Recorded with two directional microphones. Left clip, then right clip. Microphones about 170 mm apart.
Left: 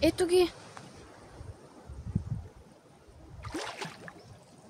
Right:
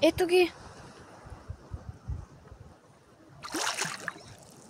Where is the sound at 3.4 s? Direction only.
90° right.